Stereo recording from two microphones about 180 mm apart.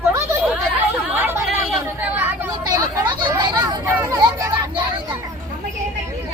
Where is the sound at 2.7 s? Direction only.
25° right (ahead or behind).